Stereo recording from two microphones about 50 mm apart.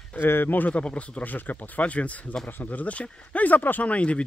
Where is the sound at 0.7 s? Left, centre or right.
Left.